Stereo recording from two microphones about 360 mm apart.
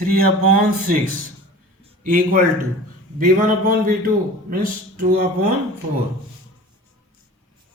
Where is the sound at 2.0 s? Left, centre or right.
Right.